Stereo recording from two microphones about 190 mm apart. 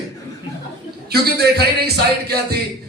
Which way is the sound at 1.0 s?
55° right (ahead or behind).